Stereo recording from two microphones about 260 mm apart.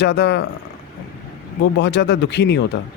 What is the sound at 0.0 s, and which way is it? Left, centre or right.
Speech, left.